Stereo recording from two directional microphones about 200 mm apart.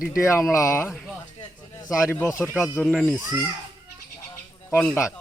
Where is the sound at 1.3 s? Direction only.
20° left (ahead or behind).